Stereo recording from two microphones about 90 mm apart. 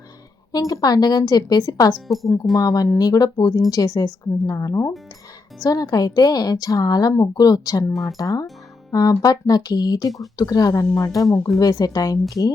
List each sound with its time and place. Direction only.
0.7 s a woman's voice: 45° left (ahead or behind)
2.0 s speech: centre (ahead or behind)
2.6 s a woman's voice: 45° left (ahead or behind)